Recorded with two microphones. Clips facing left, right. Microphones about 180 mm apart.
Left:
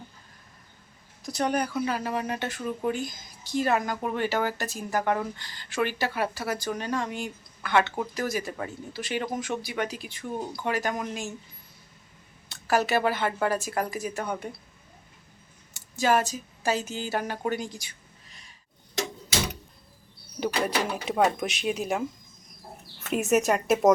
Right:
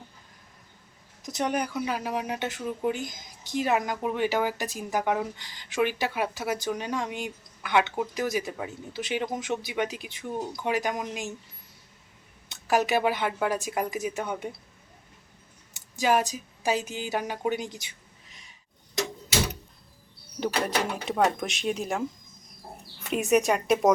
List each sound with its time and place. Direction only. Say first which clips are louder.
1.2 s speech: left 1 dB; 20° right (ahead or behind)
12.5 s speech: even; 15° right (ahead or behind)
15.7 s speech: even; 15° right (ahead or behind)
20.4 s speech: even; centre (ahead or behind)